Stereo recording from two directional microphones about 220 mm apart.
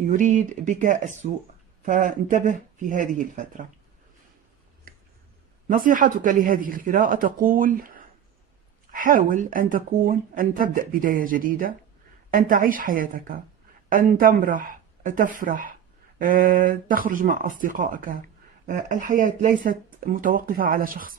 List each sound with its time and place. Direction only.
0.0 s speech: 35° right (ahead or behind)
5.7 s speech: 40° right (ahead or behind)